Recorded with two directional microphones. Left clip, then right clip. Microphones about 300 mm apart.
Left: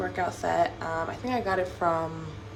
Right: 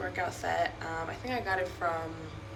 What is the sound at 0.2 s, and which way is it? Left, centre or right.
Speech, centre.